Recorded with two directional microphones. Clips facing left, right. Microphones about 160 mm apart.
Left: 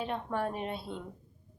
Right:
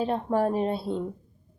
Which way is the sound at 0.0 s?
35° right (ahead or behind).